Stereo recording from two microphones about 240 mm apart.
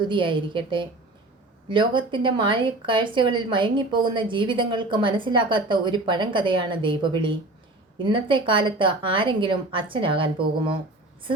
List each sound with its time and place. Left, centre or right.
0.0 s a woman's voice: centre